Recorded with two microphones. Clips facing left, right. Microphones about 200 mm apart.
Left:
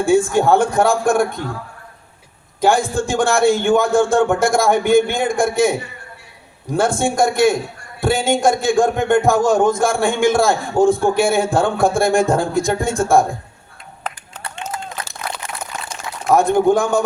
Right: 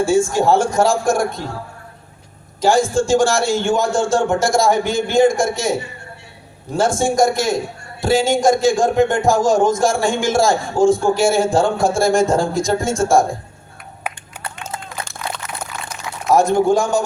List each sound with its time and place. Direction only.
0.0 s a man's voice: 55° left (ahead or behind)
2.6 s a man's voice: 55° left (ahead or behind)
6.7 s a man's voice: 55° left (ahead or behind)
14.7 s a sound: 25° right (ahead or behind)
16.3 s a man's voice: 55° left (ahead or behind)